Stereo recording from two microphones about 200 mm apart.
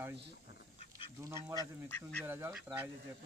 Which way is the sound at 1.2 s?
15° right (ahead or behind).